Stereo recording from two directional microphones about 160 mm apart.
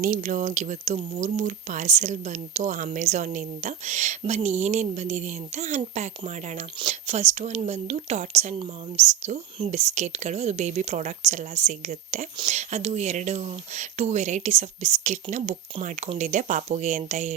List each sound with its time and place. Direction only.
0.0 s speech: 55° right (ahead or behind)